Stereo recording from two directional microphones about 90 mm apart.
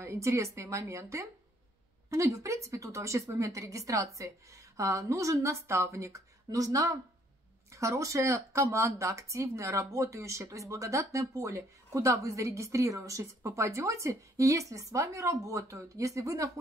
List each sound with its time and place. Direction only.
0.0 s speech: 30° right (ahead or behind)